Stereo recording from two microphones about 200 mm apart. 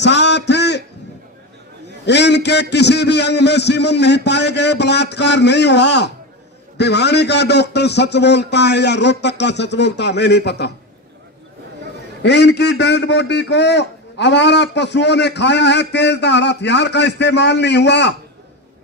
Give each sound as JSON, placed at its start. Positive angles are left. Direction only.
{"t": 0.0, "sound": "a sound", "side_deg": 60}
{"t": 2.0, "sound": "a man's voice", "side_deg": 60}
{"t": 12.2, "sound": "a man's voice", "side_deg": 60}